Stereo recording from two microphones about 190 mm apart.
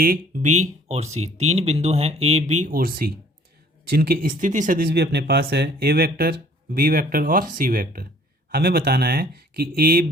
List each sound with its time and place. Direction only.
0.0 s speech: 45° right (ahead or behind)